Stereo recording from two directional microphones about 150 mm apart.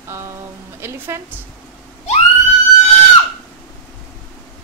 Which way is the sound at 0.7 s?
15° right (ahead or behind).